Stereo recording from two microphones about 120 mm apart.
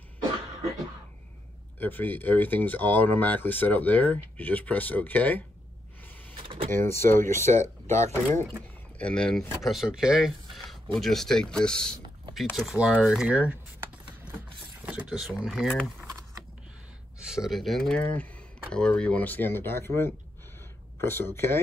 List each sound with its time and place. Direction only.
1.8 s speech: 15° left (ahead or behind)
6.3 s a sound: 45° right (ahead or behind)
6.7 s speech: 20° left (ahead or behind)
8.9 s speech: 10° left (ahead or behind)
9.7 s speech: 5° right (ahead or behind)
14.3 s a sound: 15° right (ahead or behind)
17.3 s speech: centre (ahead or behind); by 21.5 s 20° left (ahead or behind)